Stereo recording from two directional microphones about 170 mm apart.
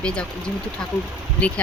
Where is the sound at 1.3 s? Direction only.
5° left (ahead or behind).